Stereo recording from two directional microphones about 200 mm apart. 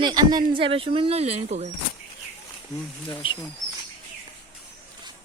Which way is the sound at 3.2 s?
25° left (ahead or behind).